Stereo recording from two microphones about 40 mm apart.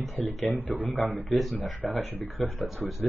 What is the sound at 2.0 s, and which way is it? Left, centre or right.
Speech, left.